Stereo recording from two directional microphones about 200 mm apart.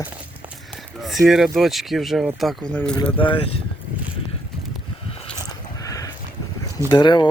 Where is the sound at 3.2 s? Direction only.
25° left (ahead or behind).